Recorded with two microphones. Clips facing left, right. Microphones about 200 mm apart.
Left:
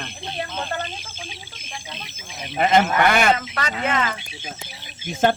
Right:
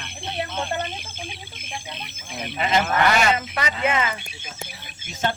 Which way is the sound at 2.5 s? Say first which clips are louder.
Left 4 dB; 50° left (ahead or behind).